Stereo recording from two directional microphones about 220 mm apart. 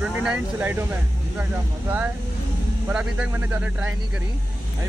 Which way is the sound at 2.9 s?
5° right (ahead or behind).